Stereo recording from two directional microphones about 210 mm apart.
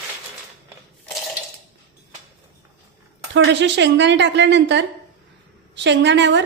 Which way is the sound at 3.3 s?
55° right (ahead or behind).